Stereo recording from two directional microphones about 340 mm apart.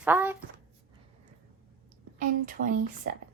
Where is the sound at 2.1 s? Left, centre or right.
Right.